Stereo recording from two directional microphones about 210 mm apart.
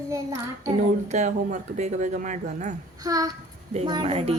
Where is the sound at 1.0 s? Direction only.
35° right (ahead or behind).